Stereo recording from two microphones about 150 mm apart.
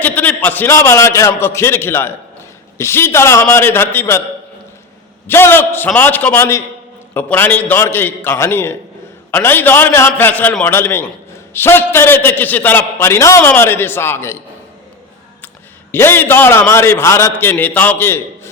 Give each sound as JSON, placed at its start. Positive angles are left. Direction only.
{"t": 0.0, "sound": "a man's voice", "side_deg": 10}
{"t": 5.3, "sound": "a man's voice", "side_deg": 15}
{"t": 15.9, "sound": "a man's voice", "side_deg": 15}